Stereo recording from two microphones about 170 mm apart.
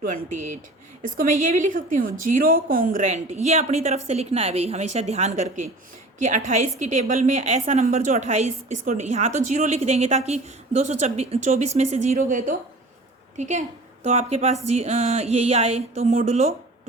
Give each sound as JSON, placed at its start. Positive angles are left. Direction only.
{"t": 0.0, "sound": "a woman's voice", "side_deg": -45}